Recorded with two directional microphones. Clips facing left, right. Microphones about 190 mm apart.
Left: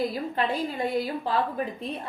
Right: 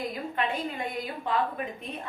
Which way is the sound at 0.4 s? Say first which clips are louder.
Left 3 dB; 35° left (ahead or behind).